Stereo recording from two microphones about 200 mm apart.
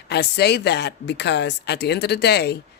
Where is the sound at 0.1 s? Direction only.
55° left (ahead or behind).